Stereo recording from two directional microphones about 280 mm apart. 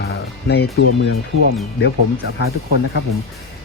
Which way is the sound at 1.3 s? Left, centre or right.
Left.